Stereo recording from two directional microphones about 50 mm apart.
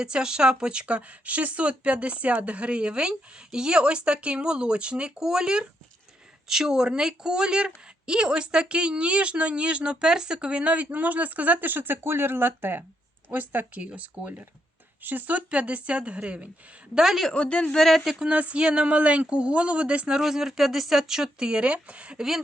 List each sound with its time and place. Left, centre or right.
0.0 s speech: centre
16.9 s speech: centre
17.3 s a man's voice: left
17.7 s speech: centre
18.0 s speech: centre
18.3 s speech: right
20.1 s speech: centre